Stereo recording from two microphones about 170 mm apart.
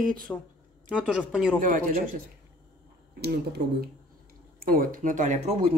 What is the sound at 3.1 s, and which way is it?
Speech, 70° right (ahead or behind).